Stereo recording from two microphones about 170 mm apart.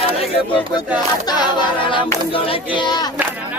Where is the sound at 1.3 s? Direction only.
25° left (ahead or behind).